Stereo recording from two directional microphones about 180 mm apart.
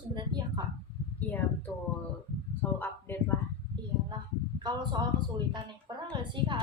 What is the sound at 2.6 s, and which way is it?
Speech, 10° left (ahead or behind).